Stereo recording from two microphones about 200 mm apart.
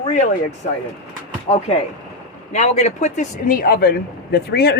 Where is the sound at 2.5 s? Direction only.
35° left (ahead or behind); by 4.8 s 55° left (ahead or behind).